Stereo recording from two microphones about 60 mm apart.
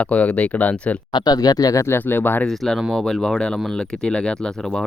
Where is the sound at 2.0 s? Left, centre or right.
Left.